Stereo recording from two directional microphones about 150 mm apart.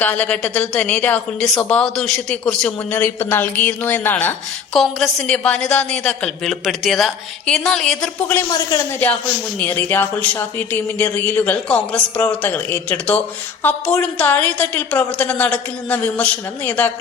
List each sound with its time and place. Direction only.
0.0 s a woman's voice: 10° left (ahead or behind)
8.3 s speech: 20° left (ahead or behind)
9.6 s speech: 15° left (ahead or behind)